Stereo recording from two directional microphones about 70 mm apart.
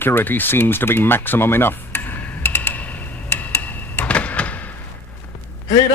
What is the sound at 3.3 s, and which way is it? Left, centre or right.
Door, left.